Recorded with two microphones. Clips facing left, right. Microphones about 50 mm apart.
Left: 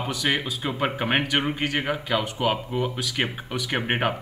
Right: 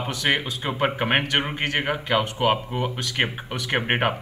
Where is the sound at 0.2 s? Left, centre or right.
Right.